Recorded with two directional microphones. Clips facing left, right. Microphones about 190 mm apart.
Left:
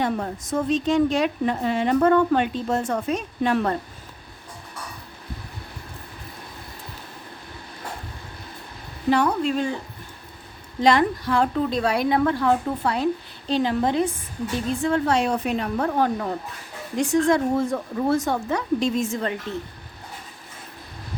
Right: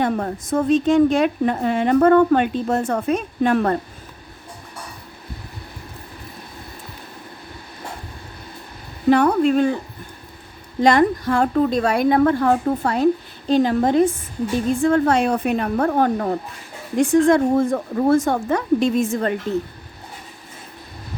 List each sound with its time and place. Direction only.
0.0 s a woman's voice: 50° right (ahead or behind)
9.0 s a woman's voice: 55° right (ahead or behind)
10.8 s a woman's voice: 45° right (ahead or behind)